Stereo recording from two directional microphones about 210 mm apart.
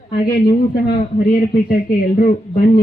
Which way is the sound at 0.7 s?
40° left (ahead or behind).